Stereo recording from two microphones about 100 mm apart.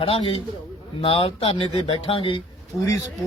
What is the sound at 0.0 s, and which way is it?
A man's voice, 70° left (ahead or behind).